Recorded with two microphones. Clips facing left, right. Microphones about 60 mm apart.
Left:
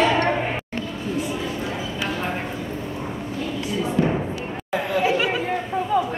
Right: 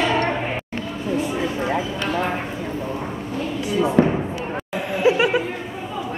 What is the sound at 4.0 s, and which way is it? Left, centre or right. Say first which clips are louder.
Slam: right 4 dB; right.